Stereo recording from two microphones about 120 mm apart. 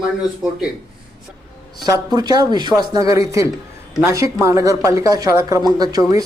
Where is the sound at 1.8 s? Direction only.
35° right (ahead or behind).